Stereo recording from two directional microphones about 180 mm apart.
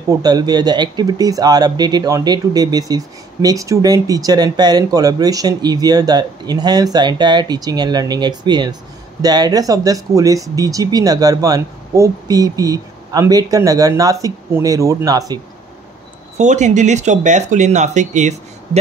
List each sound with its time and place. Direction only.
0.1 s speech: 20° right (ahead or behind)
16.3 s speech: 40° right (ahead or behind)